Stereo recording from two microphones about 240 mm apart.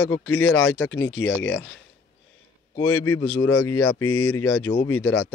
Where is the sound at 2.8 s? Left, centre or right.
Left.